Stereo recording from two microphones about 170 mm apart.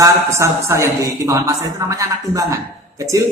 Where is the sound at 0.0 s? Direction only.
15° right (ahead or behind).